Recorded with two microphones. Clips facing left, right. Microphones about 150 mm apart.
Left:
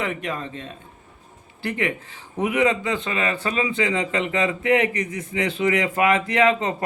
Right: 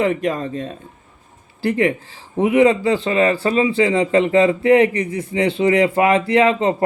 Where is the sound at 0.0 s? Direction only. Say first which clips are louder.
Right 9 dB; 35° right (ahead or behind).